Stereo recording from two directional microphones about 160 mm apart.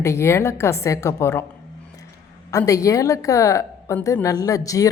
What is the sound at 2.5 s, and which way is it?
A woman's voice, 20° left (ahead or behind).